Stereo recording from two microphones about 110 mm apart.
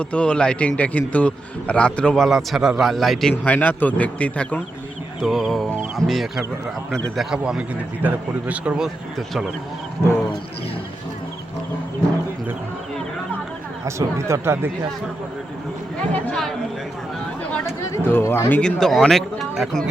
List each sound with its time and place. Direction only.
0.0 s a man's voice: 10° left (ahead or behind)
3.4 s a man's voice: 15° left (ahead or behind)
5.2 s a man's voice: centre (ahead or behind)
13.8 s speech: 25° right (ahead or behind)
17.6 s speech: 20° left (ahead or behind)
18.8 s a man's voice: 5° left (ahead or behind)